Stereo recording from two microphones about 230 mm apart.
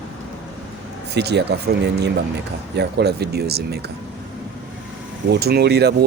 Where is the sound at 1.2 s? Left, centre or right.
Right.